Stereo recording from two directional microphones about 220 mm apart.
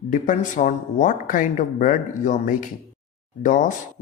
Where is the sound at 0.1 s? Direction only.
35° left (ahead or behind).